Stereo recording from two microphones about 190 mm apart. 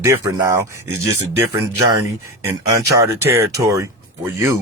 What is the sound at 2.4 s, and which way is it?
Speech, 15° right (ahead or behind).